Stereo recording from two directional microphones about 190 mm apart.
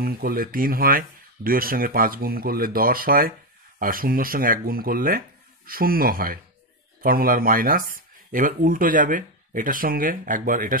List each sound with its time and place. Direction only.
0.0 s speech: 50° right (ahead or behind)